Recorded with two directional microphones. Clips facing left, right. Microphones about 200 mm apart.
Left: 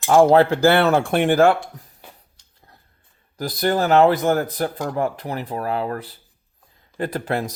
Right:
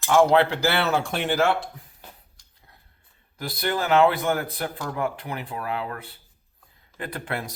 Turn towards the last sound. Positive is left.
turn(degrees=40)  # may be behind; listen again after turning